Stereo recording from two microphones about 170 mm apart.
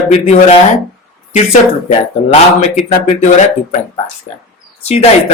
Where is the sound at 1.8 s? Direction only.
50° left (ahead or behind).